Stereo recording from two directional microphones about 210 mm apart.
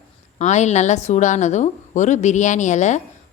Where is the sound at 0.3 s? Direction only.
35° left (ahead or behind).